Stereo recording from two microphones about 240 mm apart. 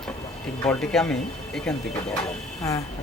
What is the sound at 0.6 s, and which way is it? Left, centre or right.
Speech, centre.